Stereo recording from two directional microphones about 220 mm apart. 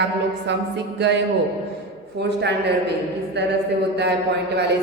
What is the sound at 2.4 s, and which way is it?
A woman's voice, 50° right (ahead or behind).